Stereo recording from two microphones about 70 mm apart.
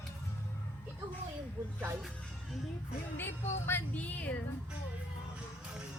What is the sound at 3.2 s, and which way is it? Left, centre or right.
Music, left.